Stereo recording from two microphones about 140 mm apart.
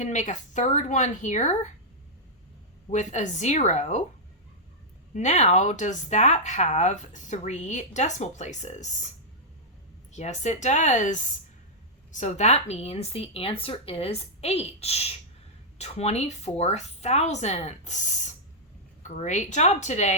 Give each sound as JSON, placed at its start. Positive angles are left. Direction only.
{"t": 0.0, "sound": "speech", "side_deg": 60}
{"t": 2.9, "sound": "speech", "side_deg": 60}
{"t": 5.1, "sound": "a woman's voice", "side_deg": 55}